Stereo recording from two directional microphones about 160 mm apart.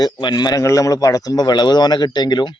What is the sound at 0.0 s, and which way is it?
Speech, 25° left (ahead or behind).